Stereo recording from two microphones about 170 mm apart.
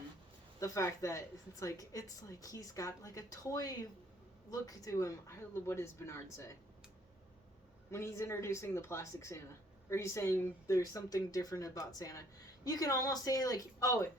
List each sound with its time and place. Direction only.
0.6 s a woman's voice: 20° left (ahead or behind)
7.9 s a woman's voice: 15° left (ahead or behind)